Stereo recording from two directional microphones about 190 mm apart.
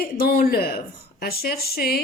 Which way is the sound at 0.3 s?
50° left (ahead or behind).